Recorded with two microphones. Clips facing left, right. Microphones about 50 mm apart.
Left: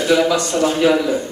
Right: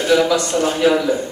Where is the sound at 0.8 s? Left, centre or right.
Centre.